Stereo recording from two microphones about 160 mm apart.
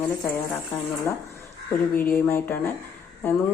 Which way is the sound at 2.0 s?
15° left (ahead or behind).